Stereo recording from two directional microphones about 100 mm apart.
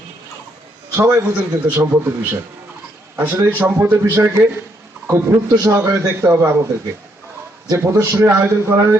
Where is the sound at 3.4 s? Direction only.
20° right (ahead or behind).